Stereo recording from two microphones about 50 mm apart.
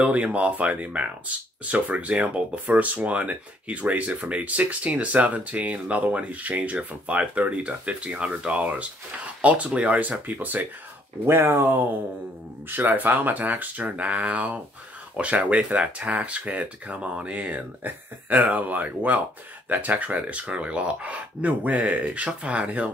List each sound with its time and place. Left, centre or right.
0.0 s speech: right
11.2 s speech: right